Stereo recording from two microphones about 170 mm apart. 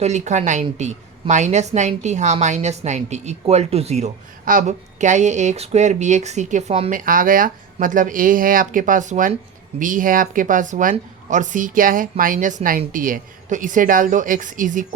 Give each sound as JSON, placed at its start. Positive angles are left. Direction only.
{"t": 0.0, "sound": "a woman's voice", "side_deg": -45}
{"t": 6.9, "sound": "a woman's voice", "side_deg": -55}